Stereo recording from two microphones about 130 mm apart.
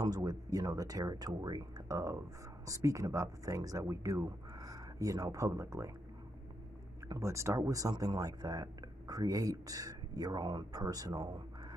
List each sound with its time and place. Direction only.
0.0 s speech: 30° right (ahead or behind)
7.1 s speech: 25° right (ahead or behind)